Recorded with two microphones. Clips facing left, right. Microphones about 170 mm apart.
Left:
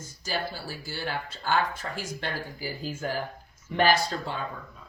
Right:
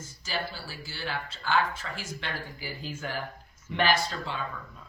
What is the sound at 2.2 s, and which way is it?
Speech, 40° left (ahead or behind).